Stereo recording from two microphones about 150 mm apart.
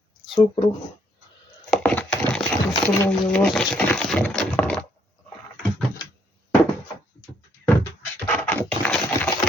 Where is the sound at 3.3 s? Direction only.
5° left (ahead or behind).